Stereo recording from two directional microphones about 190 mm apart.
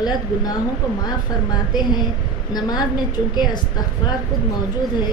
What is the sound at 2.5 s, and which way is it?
Speech, 20° left (ahead or behind).